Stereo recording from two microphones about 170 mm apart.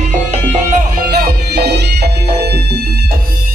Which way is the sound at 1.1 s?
80° right.